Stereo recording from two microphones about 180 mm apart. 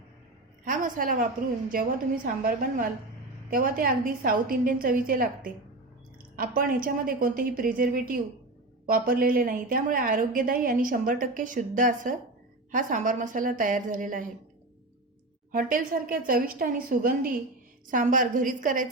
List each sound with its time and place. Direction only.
0.6 s a woman's voice: 50° right (ahead or behind)
15.5 s a woman's voice: 50° right (ahead or behind)